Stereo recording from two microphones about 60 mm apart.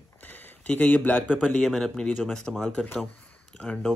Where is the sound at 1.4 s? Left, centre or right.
Centre.